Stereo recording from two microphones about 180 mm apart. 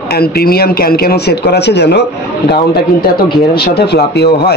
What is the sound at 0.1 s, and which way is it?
Speech, 60° left (ahead or behind).